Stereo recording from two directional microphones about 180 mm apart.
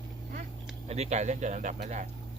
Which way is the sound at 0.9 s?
40° right (ahead or behind).